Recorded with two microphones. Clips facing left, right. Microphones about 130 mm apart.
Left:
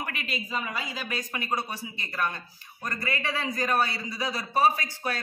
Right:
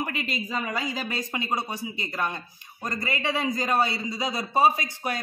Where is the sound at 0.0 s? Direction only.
25° right (ahead or behind).